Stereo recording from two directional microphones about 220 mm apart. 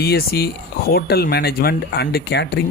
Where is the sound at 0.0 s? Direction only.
45° left (ahead or behind).